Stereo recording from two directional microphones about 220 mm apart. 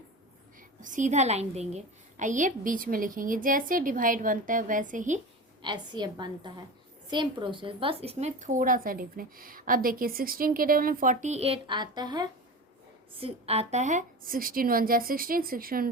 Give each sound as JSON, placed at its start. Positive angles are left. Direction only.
{"t": 0.8, "sound": "speech", "side_deg": -35}
{"t": 5.6, "sound": "a woman's voice", "side_deg": -20}